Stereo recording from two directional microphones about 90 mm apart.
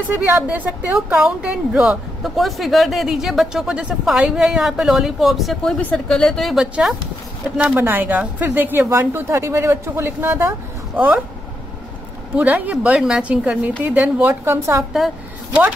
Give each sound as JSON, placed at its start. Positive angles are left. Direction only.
{"t": 0.1, "sound": "a woman's voice", "side_deg": -20}
{"t": 5.8, "sound": "a woman's voice", "side_deg": 10}
{"t": 12.4, "sound": "a woman's voice", "side_deg": -15}
{"t": 14.9, "sound": "a woman's voice", "side_deg": 0}